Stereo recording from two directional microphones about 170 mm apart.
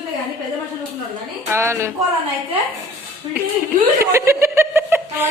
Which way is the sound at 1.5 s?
15° right (ahead or behind).